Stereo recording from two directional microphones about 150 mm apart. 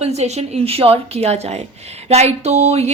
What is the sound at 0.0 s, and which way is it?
Speech, 45° right (ahead or behind).